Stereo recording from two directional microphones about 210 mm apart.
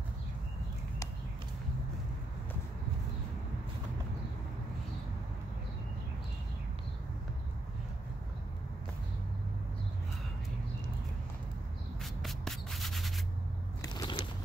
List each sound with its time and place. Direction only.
12.0 s rub: centre (ahead or behind)
13.9 s biting: 20° left (ahead or behind)